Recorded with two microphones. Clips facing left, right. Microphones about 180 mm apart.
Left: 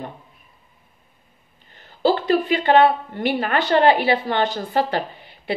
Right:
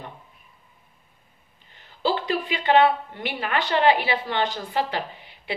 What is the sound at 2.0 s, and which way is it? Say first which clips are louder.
A woman's voice: left 7 dB; 45° left (ahead or behind).